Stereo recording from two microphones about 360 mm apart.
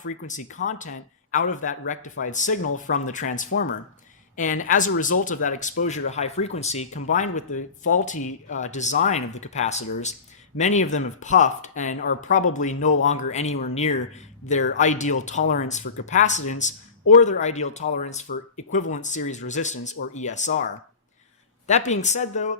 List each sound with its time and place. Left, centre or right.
0.3 s speech: left
21.7 s speech: centre